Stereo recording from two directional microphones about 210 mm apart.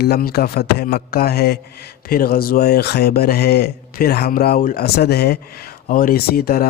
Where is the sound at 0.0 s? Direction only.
45° left (ahead or behind).